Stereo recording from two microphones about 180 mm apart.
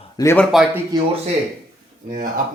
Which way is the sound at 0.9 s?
20° right (ahead or behind).